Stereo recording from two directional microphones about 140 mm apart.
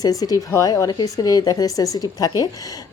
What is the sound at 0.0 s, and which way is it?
A woman's voice, 25° left (ahead or behind).